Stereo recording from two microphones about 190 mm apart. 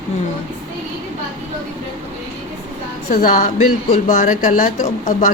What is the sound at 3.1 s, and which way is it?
Speech, 45° left (ahead or behind).